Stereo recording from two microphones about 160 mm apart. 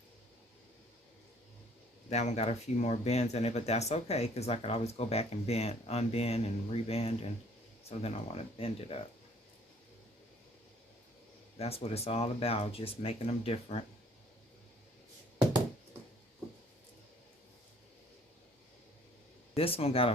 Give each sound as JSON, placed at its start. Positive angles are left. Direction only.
{"t": 2.0, "sound": "speech", "side_deg": 45}
{"t": 11.5, "sound": "speech", "side_deg": 40}
{"t": 19.5, "sound": "speech", "side_deg": 35}